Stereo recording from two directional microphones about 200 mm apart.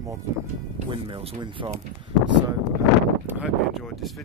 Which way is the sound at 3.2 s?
5° right (ahead or behind).